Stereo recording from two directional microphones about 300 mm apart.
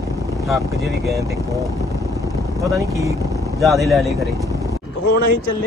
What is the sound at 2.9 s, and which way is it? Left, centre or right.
Speech, centre.